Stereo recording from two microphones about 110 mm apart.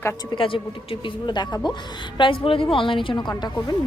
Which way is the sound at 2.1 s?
50° left (ahead or behind).